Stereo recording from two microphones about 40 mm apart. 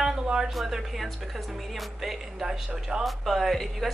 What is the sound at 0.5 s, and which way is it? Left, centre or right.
A woman's voice, centre.